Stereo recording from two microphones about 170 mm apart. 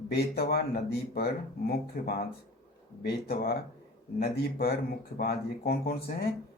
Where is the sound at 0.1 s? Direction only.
70° left (ahead or behind).